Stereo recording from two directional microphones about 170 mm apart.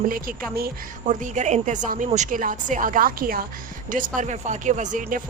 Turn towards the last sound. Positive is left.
turn(degrees=-50)  # may be behind; listen again after turning